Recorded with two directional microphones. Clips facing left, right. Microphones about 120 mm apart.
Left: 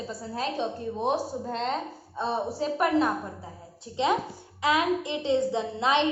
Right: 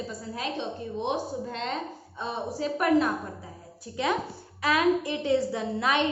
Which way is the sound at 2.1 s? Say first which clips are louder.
Left 4 dB; 35° left (ahead or behind).